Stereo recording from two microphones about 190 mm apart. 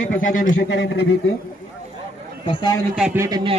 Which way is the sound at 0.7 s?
65° left (ahead or behind).